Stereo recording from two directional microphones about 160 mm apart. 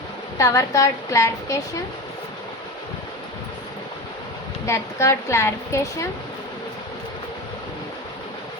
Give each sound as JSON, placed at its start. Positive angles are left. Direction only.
{"t": 0.3, "sound": "a woman's voice", "side_deg": 20}
{"t": 4.6, "sound": "a woman's voice", "side_deg": 20}